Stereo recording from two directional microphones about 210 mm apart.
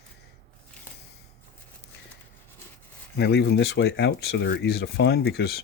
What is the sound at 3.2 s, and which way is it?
Speech, 55° left (ahead or behind).